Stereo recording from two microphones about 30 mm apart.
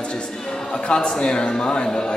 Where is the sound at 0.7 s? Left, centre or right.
Left.